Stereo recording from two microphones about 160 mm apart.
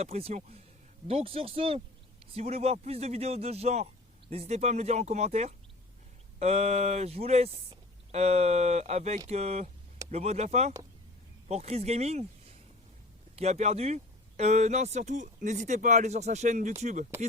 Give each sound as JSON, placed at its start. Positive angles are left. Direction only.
{"t": 0.0, "sound": "speech", "side_deg": -40}